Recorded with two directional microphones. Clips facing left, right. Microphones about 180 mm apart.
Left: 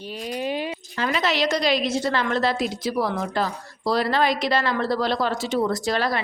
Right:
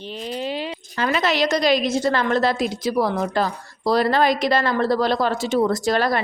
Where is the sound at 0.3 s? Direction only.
15° left (ahead or behind).